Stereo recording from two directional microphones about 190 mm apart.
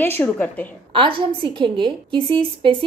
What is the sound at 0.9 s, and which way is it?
A woman's voice, 25° right (ahead or behind).